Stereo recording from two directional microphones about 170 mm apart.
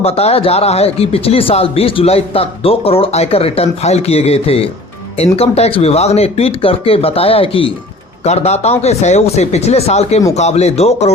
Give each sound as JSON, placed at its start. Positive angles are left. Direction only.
{"t": 0.0, "sound": "speech", "side_deg": 35}